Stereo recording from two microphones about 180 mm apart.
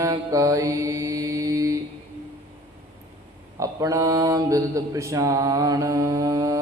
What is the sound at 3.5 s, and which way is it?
Mantra, 15° right (ahead or behind).